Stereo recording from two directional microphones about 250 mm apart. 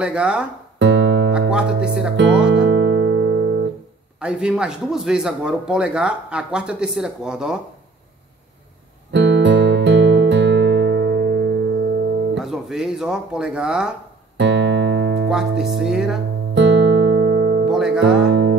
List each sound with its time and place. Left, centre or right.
0.0 s a man's voice: centre
0.7 s guitar: right
2.1 s music: right
4.2 s a man's voice: centre
9.1 s music: right
12.4 s a man's voice: centre
14.3 s music: right
15.2 s a man's voice: centre
16.5 s music: right
17.6 s music: centre
18.0 s music: right